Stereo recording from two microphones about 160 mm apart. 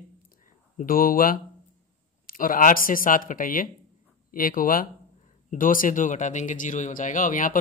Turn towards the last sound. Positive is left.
turn(degrees=60)  # may be behind; listen again after turning